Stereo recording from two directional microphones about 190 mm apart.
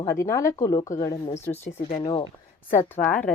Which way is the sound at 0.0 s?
15° left (ahead or behind).